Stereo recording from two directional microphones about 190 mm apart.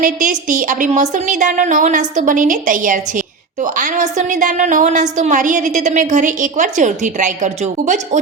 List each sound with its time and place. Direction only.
0.0 s a woman's voice: 45° right (ahead or behind)